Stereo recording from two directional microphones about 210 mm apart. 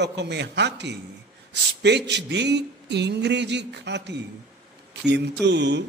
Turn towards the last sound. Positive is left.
turn(degrees=-55)  # may be behind; listen again after turning